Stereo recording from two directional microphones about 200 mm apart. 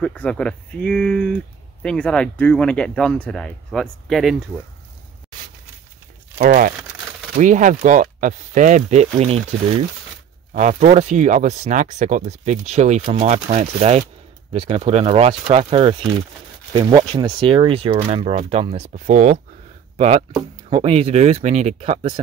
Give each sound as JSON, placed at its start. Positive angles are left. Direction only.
{"t": 0.0, "sound": "speech", "side_deg": 5}
{"t": 6.4, "sound": "speech", "side_deg": -45}